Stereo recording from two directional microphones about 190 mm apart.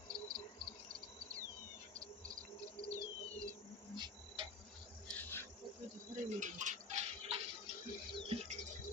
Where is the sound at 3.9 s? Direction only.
25° right (ahead or behind).